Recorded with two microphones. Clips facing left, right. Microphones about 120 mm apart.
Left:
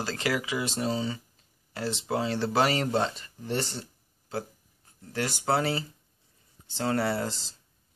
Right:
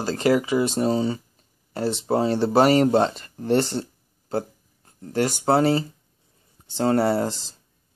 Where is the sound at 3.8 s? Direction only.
45° right (ahead or behind).